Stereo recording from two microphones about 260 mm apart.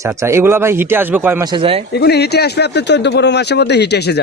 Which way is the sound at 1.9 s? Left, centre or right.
Left.